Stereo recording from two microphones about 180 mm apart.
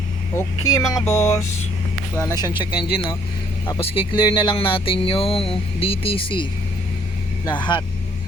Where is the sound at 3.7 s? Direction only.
30° left (ahead or behind).